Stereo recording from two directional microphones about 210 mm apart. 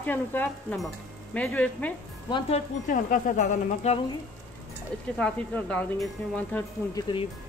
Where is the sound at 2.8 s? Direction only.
40° left (ahead or behind).